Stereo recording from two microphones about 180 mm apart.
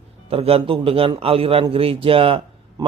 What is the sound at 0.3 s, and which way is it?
A man's voice, 30° right (ahead or behind).